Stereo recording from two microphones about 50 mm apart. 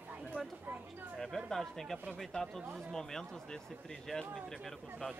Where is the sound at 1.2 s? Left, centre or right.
Centre.